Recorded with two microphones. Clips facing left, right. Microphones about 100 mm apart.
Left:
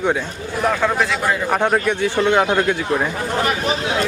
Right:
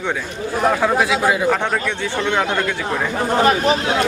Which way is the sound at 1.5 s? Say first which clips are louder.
Left 3 dB; 15° left (ahead or behind).